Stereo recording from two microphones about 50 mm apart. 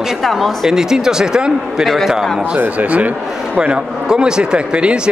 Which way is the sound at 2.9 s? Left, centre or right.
Right.